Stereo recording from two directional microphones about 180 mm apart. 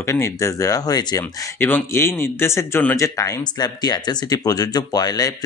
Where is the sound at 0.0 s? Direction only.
15° left (ahead or behind).